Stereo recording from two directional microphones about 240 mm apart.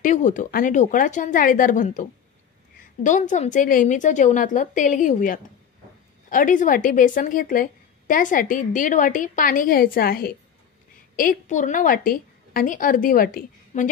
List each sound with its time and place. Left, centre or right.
0.0 s a woman's voice: left